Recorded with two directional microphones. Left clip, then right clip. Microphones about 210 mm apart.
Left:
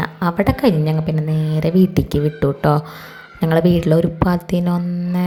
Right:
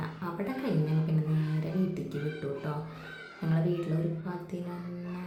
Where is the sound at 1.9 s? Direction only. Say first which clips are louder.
Left 16 dB; 45° left (ahead or behind).